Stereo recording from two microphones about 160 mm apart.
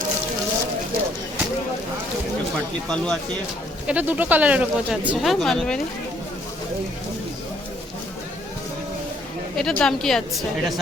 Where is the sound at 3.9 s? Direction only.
10° right (ahead or behind).